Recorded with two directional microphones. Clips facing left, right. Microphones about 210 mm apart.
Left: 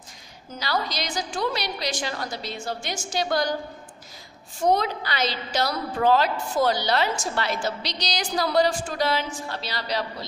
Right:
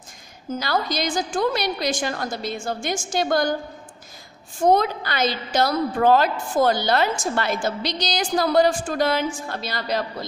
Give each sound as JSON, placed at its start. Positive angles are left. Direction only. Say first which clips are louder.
{"t": 0.6, "sound": "a woman's voice", "louder": "right 3 dB", "side_deg": -50}
{"t": 4.6, "sound": "a woman's voice", "louder": "right 4 dB", "side_deg": -50}